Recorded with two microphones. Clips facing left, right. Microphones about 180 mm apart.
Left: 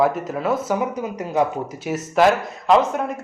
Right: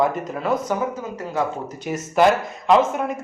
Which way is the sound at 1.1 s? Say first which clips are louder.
Left 5 dB; 15° left (ahead or behind).